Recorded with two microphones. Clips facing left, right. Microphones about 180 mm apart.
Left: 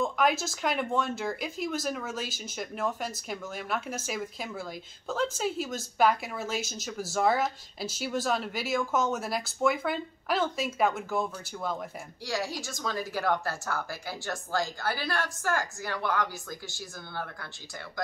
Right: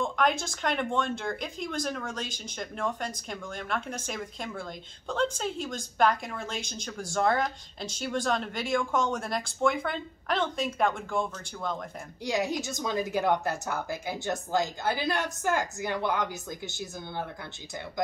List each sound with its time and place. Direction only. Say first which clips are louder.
0.0 s speech: left 1 dB; 5° left (ahead or behind)
12.3 s a woman's voice: right 4 dB; 20° right (ahead or behind)